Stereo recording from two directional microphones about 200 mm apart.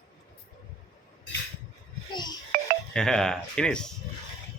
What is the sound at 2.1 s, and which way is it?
Music, 20° left (ahead or behind).